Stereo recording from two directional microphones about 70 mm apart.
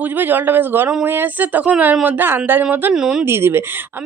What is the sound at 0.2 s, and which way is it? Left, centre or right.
A man's voice, right.